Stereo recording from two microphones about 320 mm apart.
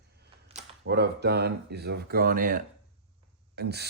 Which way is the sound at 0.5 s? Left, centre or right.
Centre.